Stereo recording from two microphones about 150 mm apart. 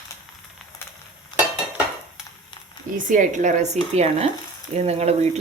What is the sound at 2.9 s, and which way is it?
Frying, 60° right (ahead or behind).